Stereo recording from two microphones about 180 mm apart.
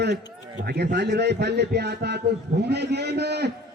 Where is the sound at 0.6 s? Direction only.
60° right (ahead or behind).